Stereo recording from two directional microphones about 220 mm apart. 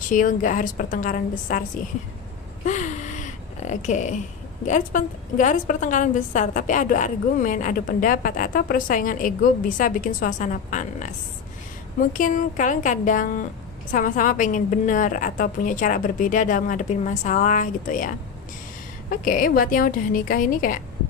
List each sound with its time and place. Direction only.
0.1 s a woman's voice: 35° left (ahead or behind)
2.6 s a sound: 35° left (ahead or behind)
4.6 s a woman's voice: 35° left (ahead or behind)
12.1 s a woman's voice: 35° left (ahead or behind)